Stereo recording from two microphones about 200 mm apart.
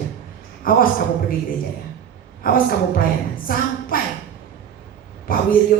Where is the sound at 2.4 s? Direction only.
45° left (ahead or behind).